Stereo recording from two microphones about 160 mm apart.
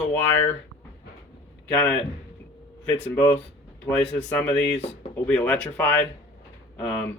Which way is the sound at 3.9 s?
15° left (ahead or behind).